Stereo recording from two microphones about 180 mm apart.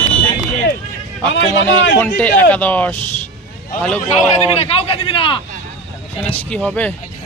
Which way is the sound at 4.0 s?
35° left (ahead or behind).